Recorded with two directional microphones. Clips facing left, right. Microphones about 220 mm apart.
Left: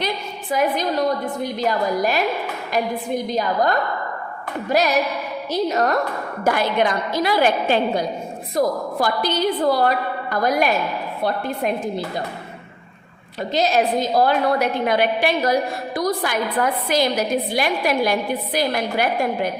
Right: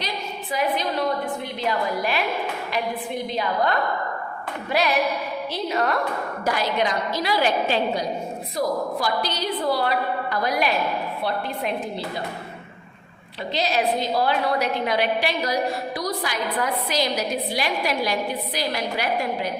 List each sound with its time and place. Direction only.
0.5 s a woman's voice: 45° left (ahead or behind)
3.2 s a woman's voice: 40° left (ahead or behind)
6.4 s a woman's voice: 55° left (ahead or behind)
13.5 s a woman's voice: 45° left (ahead or behind)